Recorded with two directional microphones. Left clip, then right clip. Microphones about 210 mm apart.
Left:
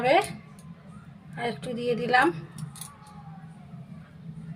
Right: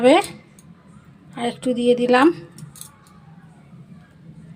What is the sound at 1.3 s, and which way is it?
Speech, 40° right (ahead or behind).